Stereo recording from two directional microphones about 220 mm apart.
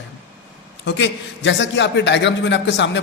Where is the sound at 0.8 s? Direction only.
55° left (ahead or behind).